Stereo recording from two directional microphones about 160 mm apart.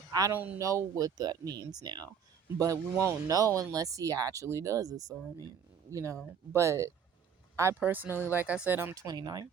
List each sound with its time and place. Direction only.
0.1 s speech: 20° right (ahead or behind)